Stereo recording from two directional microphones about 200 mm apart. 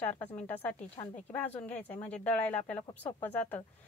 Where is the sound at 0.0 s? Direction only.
10° left (ahead or behind).